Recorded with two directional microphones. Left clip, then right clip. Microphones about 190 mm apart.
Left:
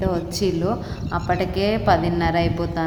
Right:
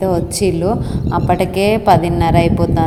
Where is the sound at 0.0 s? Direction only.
20° right (ahead or behind).